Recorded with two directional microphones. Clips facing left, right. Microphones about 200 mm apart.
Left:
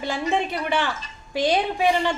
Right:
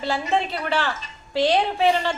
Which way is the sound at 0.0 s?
15° left (ahead or behind).